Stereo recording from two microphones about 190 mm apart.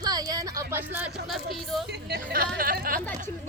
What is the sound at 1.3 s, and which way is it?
Speech, centre (ahead or behind).